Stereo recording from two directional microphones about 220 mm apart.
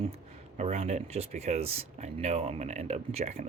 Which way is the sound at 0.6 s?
30° right (ahead or behind).